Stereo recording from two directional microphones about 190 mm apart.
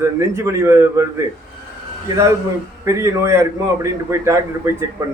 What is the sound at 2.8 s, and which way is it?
A man's voice, 15° right (ahead or behind).